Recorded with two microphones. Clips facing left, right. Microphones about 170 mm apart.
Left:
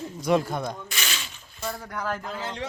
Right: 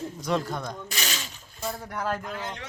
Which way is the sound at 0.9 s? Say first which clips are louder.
Right 1 dB; 40° right (ahead or behind).